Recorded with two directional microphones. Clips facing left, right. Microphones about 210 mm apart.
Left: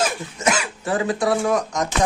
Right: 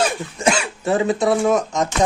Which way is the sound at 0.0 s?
30° right (ahead or behind).